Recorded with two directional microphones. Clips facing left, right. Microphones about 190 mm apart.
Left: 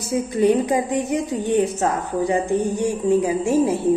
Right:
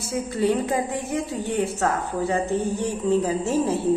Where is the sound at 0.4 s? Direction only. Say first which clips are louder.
Left 5 dB; 15° left (ahead or behind).